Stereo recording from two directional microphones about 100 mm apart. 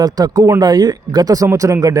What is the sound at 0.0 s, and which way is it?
Speech, 40° right (ahead or behind).